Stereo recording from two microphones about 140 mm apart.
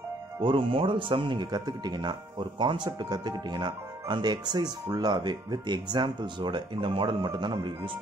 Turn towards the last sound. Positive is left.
turn(degrees=-35)  # may be behind; listen again after turning